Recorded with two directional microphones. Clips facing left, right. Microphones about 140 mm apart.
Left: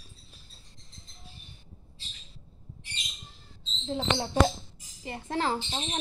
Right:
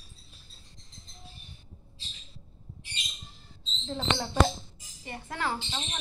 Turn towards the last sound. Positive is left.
turn(degrees=35)  # may be behind; listen again after turning